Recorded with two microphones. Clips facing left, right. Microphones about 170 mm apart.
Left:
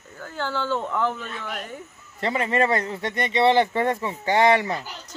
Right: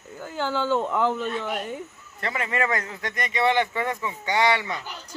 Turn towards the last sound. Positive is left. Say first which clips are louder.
# left 4 dB
turn(degrees=35)  # may be behind; listen again after turning